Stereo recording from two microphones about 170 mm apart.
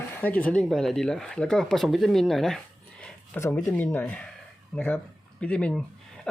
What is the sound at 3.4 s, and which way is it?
Speech, 15° left (ahead or behind).